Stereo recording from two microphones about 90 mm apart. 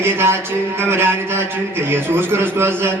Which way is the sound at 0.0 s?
25° right (ahead or behind).